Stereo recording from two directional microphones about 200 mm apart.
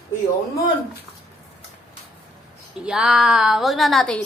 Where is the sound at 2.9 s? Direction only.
5° right (ahead or behind).